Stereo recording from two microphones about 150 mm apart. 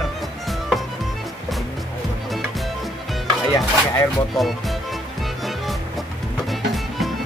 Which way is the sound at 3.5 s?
20° left (ahead or behind).